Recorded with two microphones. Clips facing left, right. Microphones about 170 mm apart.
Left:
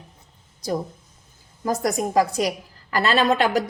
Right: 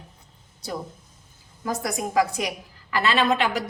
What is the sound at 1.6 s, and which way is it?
A woman's voice, 40° left (ahead or behind).